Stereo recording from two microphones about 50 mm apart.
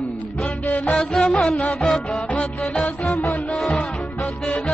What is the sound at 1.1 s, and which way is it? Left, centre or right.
Music, centre.